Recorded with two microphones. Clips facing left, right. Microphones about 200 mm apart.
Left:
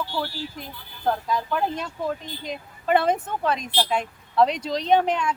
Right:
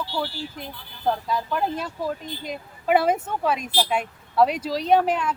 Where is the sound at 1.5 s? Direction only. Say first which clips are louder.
Even; 5° right (ahead or behind).